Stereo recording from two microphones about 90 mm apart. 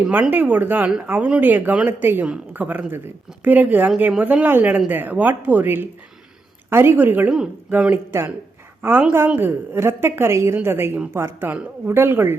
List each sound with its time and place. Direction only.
0.0 s a woman's voice: 15° right (ahead or behind)